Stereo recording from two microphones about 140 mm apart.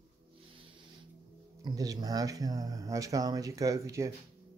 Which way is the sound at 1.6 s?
25° right (ahead or behind).